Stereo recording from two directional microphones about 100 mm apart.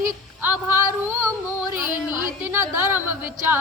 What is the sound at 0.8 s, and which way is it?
Speech, 25° right (ahead or behind).